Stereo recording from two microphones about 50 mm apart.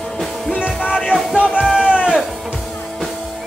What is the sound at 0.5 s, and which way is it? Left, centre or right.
Music, left.